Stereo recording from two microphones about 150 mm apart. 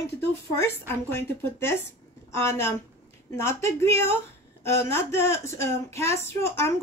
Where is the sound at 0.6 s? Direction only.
15° left (ahead or behind).